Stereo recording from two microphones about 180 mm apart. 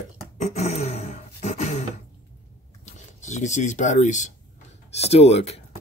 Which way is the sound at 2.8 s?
40° left (ahead or behind).